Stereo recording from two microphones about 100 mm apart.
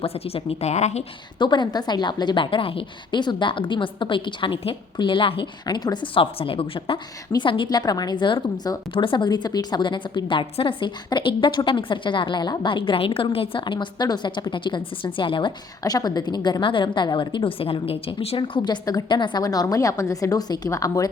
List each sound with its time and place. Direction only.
0.0 s a woman's voice: 70° left (ahead or behind); by 1.0 s 90° left
1.4 s a woman's voice: 50° left (ahead or behind)
15.8 s a woman's voice: 40° left (ahead or behind)